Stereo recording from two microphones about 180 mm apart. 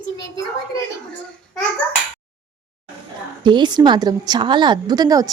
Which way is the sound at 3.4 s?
25° right (ahead or behind).